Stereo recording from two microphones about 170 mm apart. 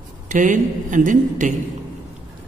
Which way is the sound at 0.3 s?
50° right (ahead or behind).